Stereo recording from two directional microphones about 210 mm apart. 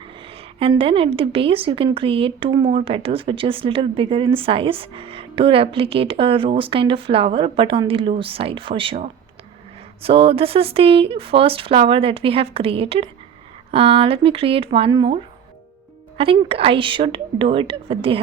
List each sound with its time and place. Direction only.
0.6 s a woman's voice: 25° right (ahead or behind)